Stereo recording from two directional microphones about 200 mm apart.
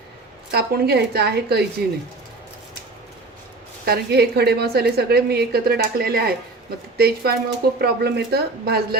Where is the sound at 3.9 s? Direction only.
55° right (ahead or behind).